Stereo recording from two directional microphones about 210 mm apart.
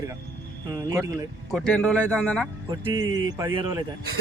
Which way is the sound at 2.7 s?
20° right (ahead or behind).